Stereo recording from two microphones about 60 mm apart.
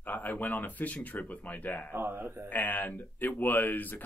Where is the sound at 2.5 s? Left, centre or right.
Left.